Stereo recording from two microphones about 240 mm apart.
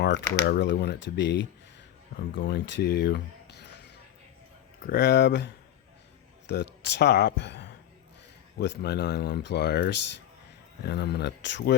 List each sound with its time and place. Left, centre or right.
0.0 s speech: left
4.8 s speech: left
6.8 s speech: left